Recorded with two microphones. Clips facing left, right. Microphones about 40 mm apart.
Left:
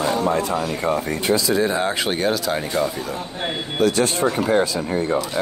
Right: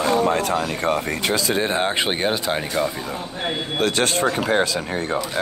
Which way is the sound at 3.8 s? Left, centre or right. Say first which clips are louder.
Left 2 dB; right.